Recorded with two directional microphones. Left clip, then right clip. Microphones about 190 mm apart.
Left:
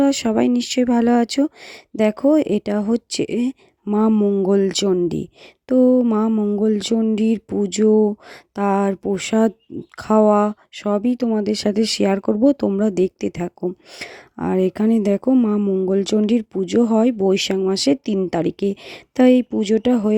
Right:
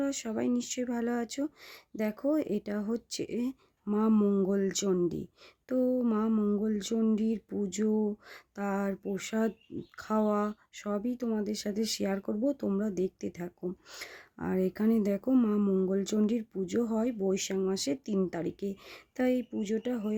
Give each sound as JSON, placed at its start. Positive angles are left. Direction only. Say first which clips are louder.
{"t": 0.0, "sound": "speech", "louder": "left 15 dB", "side_deg": 40}
{"t": 4.1, "sound": "speech", "louder": "left 10 dB", "side_deg": 20}
{"t": 4.4, "sound": "speech", "louder": "left 13 dB", "side_deg": 35}
{"t": 6.3, "sound": "speech", "louder": "left 10 dB", "side_deg": 25}
{"t": 6.6, "sound": "speech", "louder": "left 13 dB", "side_deg": 35}
{"t": 15.6, "sound": "speech", "louder": "left 10 dB", "side_deg": 20}
{"t": 15.9, "sound": "speech", "louder": "left 13 dB", "side_deg": 35}